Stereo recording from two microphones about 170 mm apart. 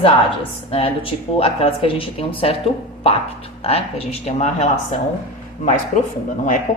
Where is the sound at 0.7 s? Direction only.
35° left (ahead or behind).